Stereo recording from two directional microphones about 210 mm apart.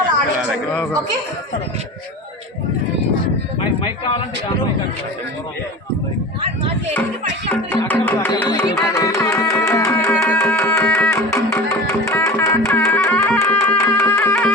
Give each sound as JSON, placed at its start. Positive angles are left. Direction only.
{"t": 3.8, "sound": "a man's voice", "side_deg": 25}
{"t": 7.5, "sound": "music", "side_deg": 10}